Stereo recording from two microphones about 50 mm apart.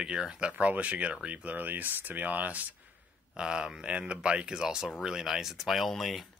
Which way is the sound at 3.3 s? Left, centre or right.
Centre.